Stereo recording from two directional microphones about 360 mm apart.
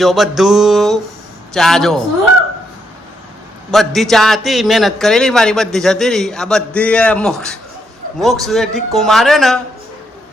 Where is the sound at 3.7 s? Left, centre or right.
Centre.